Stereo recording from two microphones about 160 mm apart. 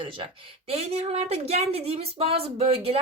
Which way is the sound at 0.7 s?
40° right (ahead or behind).